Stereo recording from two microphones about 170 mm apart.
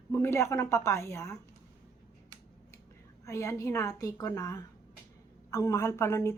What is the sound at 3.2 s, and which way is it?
A woman's voice, 20° left (ahead or behind).